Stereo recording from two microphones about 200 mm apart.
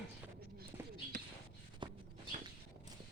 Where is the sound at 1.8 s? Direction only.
25° right (ahead or behind).